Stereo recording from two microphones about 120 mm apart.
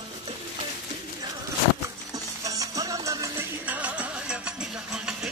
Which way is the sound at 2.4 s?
30° right (ahead or behind).